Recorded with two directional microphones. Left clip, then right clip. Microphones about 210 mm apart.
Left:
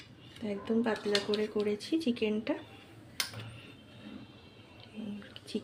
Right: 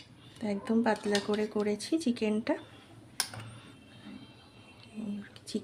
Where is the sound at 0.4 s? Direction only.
40° right (ahead or behind).